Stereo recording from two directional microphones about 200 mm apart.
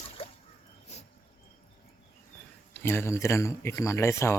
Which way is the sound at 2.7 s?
10° left (ahead or behind).